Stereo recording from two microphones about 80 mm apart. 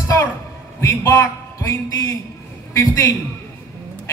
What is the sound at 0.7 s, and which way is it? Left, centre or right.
A man's voice, left.